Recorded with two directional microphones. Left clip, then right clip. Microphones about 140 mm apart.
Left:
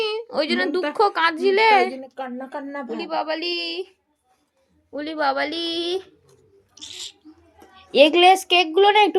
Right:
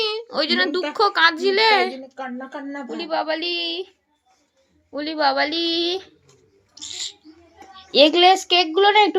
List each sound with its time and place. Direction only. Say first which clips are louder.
0.0 s a sound: right 1 dB; 15° left (ahead or behind)
0.9 s speech: right 3 dB; 15° left (ahead or behind)
2.1 s speech: left 1 dB; 70° left (ahead or behind)
3.0 s speech: right 2 dB; 10° left (ahead or behind)
6.7 s a sound: right 4 dB; 50° left (ahead or behind)
7.9 s speech: even; 15° left (ahead or behind)